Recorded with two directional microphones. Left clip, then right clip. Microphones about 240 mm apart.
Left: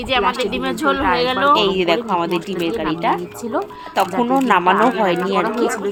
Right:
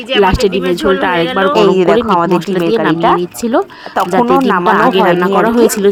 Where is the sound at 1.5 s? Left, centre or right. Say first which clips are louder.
Right 7 dB; right.